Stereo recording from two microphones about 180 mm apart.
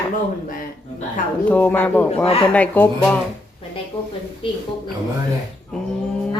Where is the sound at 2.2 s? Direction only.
30° left (ahead or behind).